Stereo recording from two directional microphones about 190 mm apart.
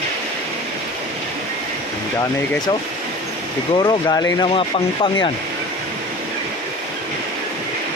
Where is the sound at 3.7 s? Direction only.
20° left (ahead or behind).